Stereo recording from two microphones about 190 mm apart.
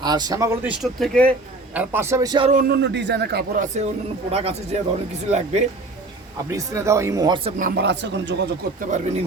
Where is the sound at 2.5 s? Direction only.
55° right (ahead or behind); by 4.5 s 30° right (ahead or behind).